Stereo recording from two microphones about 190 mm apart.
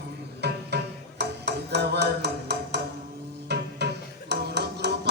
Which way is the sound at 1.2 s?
60° right (ahead or behind).